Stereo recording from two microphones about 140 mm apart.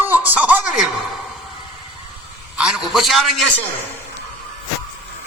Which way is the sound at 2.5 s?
5° right (ahead or behind).